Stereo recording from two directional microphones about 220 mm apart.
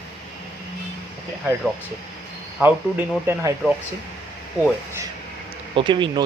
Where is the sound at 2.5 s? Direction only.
10° right (ahead or behind).